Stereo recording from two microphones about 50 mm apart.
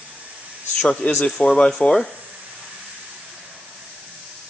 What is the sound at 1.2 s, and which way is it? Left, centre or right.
Speech, left.